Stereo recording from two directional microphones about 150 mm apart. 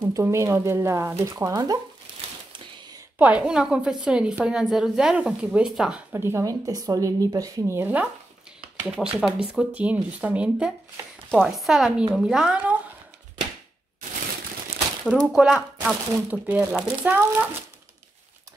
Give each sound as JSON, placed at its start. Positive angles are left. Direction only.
{"t": 0.1, "sound": "speech", "side_deg": -20}
{"t": 3.2, "sound": "speech", "side_deg": -10}
{"t": 8.5, "sound": "a sound", "side_deg": -5}
{"t": 9.2, "sound": "speech", "side_deg": -5}
{"t": 11.2, "sound": "speech", "side_deg": 5}
{"t": 15.0, "sound": "speech", "side_deg": -5}